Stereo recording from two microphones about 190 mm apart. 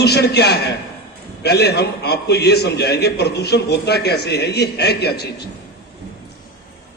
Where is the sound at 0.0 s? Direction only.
60° left (ahead or behind).